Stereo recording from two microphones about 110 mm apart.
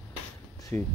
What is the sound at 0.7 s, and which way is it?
Speech, 15° left (ahead or behind).